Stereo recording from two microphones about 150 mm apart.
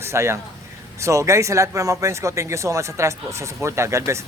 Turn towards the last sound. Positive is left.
turn(degrees=-20)  # may be behind; listen again after turning